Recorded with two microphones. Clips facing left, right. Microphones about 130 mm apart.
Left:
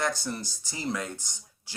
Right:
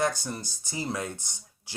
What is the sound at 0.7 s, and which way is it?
Speech, 20° right (ahead or behind).